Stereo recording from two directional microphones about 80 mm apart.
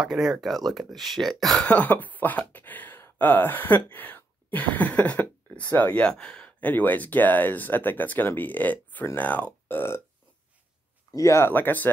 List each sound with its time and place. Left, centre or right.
0.0 s speech: centre
1.7 s speech: left
11.1 s speech: left